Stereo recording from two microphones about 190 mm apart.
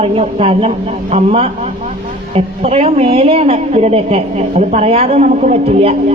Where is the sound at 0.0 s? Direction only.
30° right (ahead or behind).